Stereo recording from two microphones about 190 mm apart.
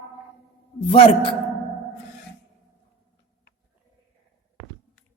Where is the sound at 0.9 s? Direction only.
30° left (ahead or behind).